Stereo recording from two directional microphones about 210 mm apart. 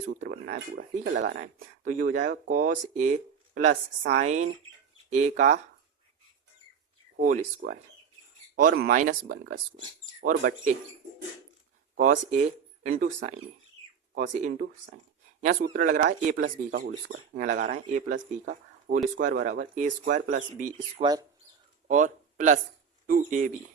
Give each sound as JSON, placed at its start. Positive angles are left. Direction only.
{"t": 0.3, "sound": "speech", "side_deg": -50}
{"t": 7.2, "sound": "speech", "side_deg": -40}
{"t": 10.2, "sound": "speech", "side_deg": -40}
{"t": 11.9, "sound": "speech", "side_deg": -40}
{"t": 14.1, "sound": "speech", "side_deg": -40}
{"t": 21.0, "sound": "speech", "side_deg": -20}
{"t": 21.8, "sound": "speech", "side_deg": -35}